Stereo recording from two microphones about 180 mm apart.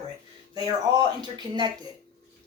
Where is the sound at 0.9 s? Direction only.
20° right (ahead or behind).